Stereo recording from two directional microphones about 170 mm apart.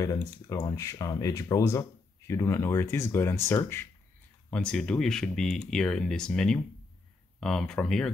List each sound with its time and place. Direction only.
0.5 s speech: 20° left (ahead or behind); by 8.1 s 5° left (ahead or behind)